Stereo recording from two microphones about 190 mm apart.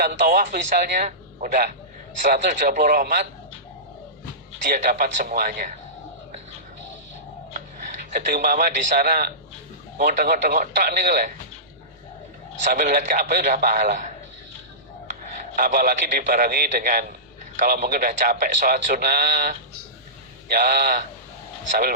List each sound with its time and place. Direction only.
0.0 s a man's voice: 45° right (ahead or behind)
4.7 s a man's voice: 45° right (ahead or behind)
8.1 s a man's voice: 50° right (ahead or behind)
12.7 s a man's voice: 45° right (ahead or behind)
15.5 s a man's voice: 45° right (ahead or behind)